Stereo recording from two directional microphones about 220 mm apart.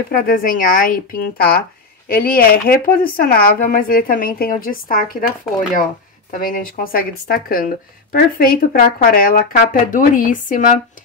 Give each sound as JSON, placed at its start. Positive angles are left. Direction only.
{"t": 0.1, "sound": "a woman's voice", "side_deg": 40}
{"t": 6.3, "sound": "a woman's voice", "side_deg": 40}